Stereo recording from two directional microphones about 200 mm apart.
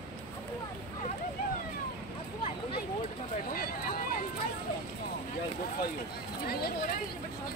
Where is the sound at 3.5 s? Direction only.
45° left (ahead or behind).